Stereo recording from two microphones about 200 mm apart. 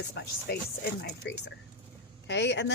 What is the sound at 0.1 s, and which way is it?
Speech, 55° left (ahead or behind).